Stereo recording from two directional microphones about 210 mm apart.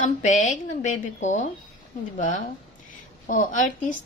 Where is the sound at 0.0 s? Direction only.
35° left (ahead or behind).